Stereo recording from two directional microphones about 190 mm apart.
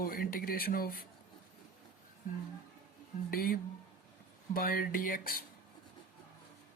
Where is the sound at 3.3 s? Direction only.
50° left (ahead or behind).